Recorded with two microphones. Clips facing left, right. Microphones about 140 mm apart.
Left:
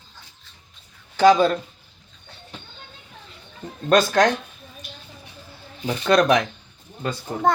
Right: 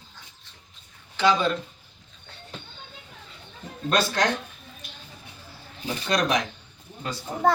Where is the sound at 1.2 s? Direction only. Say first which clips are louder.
Left 7 dB; 40° left (ahead or behind).